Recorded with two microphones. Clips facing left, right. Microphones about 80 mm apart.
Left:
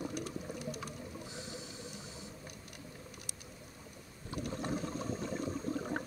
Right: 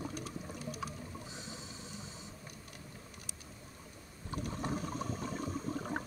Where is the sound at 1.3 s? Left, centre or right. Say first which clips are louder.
Left 2 dB; right.